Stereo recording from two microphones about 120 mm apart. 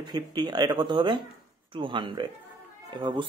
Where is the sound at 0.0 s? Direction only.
35° right (ahead or behind).